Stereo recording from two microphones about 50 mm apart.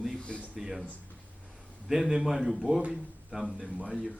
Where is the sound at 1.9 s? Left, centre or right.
Centre.